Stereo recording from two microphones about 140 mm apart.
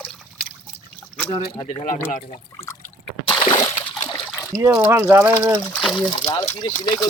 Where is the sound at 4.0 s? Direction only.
35° left (ahead or behind).